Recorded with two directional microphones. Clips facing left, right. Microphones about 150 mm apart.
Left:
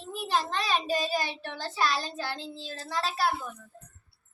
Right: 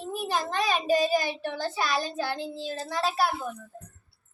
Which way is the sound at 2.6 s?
15° right (ahead or behind).